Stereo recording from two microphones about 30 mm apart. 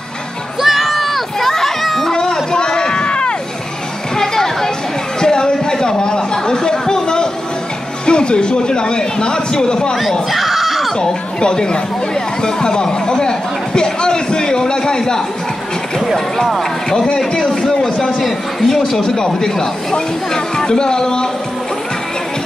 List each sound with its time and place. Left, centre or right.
0.6 s a sound: centre
2.1 s a sound: left
4.2 s music: centre
5.2 s chatter: left
8.0 s speech: left
10.3 s a sound: centre
11.0 s speech: left
17.4 s speech: centre
18.2 s a man's voice: centre
18.9 s speech: left